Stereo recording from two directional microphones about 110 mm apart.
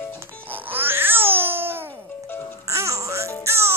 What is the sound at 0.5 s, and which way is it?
Babbling, 15° right (ahead or behind).